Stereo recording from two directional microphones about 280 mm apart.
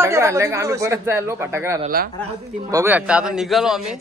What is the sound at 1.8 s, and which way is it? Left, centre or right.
Speech, right.